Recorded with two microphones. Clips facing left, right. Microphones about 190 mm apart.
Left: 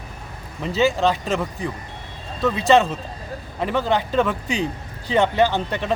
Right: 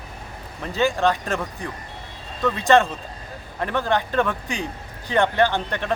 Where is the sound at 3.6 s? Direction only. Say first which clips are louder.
Left 2 dB; 10° left (ahead or behind).